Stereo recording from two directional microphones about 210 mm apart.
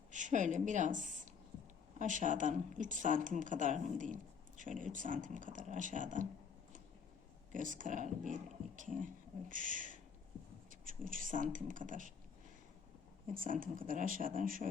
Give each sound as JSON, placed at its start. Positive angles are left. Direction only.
{"t": 0.1, "sound": "a woman's voice", "side_deg": -35}
{"t": 7.5, "sound": "speech", "side_deg": -40}
{"t": 13.3, "sound": "speech", "side_deg": -40}